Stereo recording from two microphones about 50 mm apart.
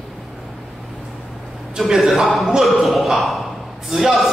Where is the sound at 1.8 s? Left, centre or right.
Centre.